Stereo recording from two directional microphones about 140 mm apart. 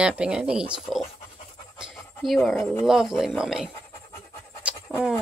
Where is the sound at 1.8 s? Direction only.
Centre (ahead or behind).